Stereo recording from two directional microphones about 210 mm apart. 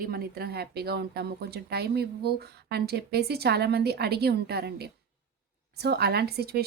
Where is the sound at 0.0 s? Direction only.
45° right (ahead or behind).